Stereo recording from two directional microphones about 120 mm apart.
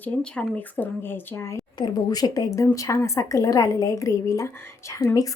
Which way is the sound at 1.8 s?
35° left (ahead or behind).